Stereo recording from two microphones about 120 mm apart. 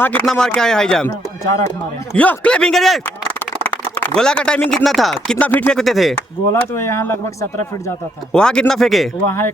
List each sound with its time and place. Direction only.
0.0 s speech: 15° left (ahead or behind)
2.1 s speech: 10° left (ahead or behind)
3.6 s a sound: 15° left (ahead or behind)
4.2 s speech: 5° left (ahead or behind)
5.8 s speech: centre (ahead or behind)
6.5 s speech: 20° left (ahead or behind)
8.3 s speech: 5° left (ahead or behind)